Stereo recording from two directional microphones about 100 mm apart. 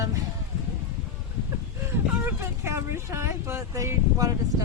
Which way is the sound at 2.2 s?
25° right (ahead or behind).